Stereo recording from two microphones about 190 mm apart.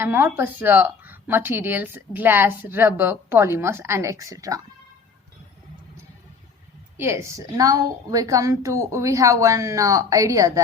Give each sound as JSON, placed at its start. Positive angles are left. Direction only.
{"t": 0.0, "sound": "a woman's voice", "side_deg": -10}
{"t": 6.9, "sound": "a woman's voice", "side_deg": -15}